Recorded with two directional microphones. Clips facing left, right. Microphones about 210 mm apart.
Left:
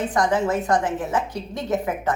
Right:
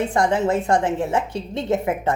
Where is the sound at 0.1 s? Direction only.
25° right (ahead or behind).